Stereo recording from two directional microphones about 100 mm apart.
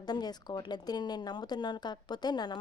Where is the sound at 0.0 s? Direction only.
45° left (ahead or behind).